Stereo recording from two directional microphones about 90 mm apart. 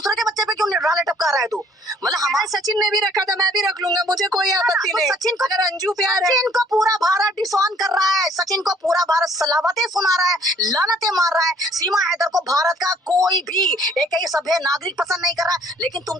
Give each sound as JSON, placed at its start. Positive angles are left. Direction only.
{"t": 0.3, "sound": "a sound", "side_deg": -45}
{"t": 2.0, "sound": "a woman's voice", "side_deg": -40}
{"t": 5.8, "sound": "a woman's voice", "side_deg": 0}
{"t": 6.7, "sound": "a woman's voice", "side_deg": -45}
{"t": 14.9, "sound": "a woman's voice", "side_deg": 0}